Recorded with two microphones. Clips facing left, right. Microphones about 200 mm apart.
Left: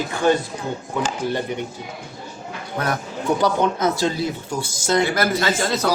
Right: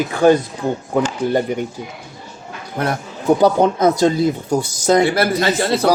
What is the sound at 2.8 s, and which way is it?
Speech, 25° right (ahead or behind).